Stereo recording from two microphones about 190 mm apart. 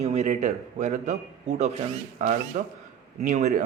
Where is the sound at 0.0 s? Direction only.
35° right (ahead or behind).